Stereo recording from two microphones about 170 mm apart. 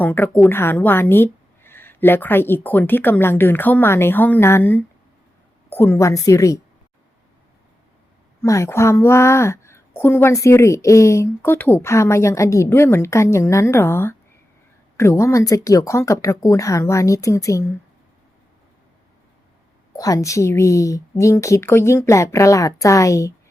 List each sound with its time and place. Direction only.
0.0 s a woman's voice: 10° left (ahead or behind)
8.4 s a woman's voice: 15° left (ahead or behind)
20.0 s a woman's voice: 20° left (ahead or behind)